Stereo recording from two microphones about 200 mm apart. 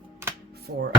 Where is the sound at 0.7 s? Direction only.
60° right (ahead or behind).